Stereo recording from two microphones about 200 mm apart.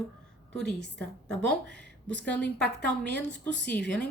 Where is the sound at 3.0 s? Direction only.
55° left (ahead or behind).